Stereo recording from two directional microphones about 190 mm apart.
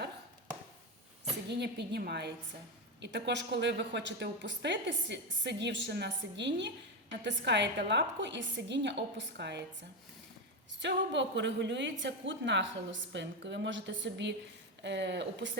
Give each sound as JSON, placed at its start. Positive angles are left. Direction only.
{"t": 1.5, "sound": "a woman's voice", "side_deg": -60}
{"t": 10.8, "sound": "a woman's voice", "side_deg": -70}